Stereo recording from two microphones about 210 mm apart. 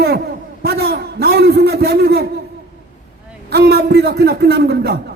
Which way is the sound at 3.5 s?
50° right (ahead or behind).